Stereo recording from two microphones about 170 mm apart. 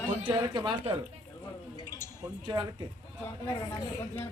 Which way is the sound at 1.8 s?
25° right (ahead or behind).